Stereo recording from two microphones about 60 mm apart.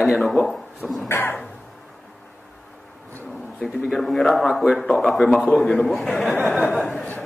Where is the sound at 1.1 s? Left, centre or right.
Left.